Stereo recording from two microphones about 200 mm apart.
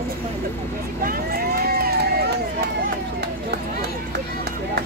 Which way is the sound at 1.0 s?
50° right (ahead or behind).